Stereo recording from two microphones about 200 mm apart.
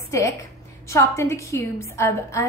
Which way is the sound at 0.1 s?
15° left (ahead or behind).